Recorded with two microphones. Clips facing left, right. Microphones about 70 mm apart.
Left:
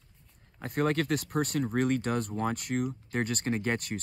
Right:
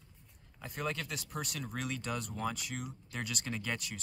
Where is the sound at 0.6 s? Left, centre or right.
Left.